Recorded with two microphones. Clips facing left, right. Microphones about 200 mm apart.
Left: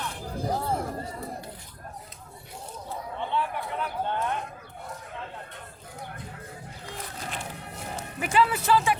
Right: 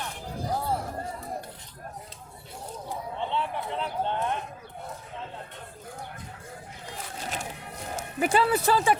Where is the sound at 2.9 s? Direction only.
20° right (ahead or behind).